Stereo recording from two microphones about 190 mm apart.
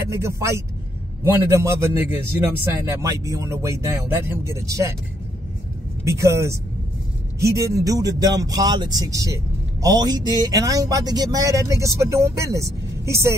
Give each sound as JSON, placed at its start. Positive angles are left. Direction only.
{"t": 0.1, "sound": "speech", "side_deg": -15}
{"t": 6.0, "sound": "speech", "side_deg": -15}